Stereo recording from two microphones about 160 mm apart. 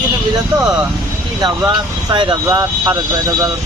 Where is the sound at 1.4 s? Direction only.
25° right (ahead or behind).